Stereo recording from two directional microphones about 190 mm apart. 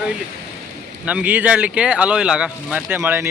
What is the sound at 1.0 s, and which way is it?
Speech, 5° right (ahead or behind).